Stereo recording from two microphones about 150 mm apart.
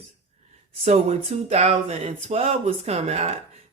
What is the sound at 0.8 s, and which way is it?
Speech, 45° right (ahead or behind).